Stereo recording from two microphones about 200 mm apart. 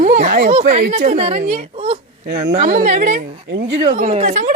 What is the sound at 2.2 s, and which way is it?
Speech, 55° right (ahead or behind).